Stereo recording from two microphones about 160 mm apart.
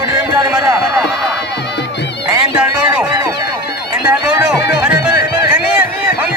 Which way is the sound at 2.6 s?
5° right (ahead or behind).